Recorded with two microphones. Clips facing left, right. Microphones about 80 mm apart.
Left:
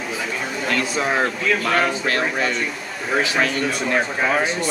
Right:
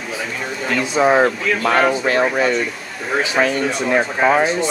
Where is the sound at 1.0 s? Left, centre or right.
Centre.